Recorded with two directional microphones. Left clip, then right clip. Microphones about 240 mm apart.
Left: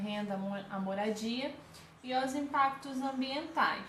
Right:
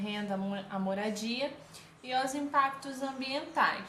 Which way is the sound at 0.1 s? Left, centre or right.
Right.